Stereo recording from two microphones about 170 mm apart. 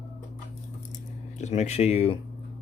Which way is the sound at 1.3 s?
40° left (ahead or behind).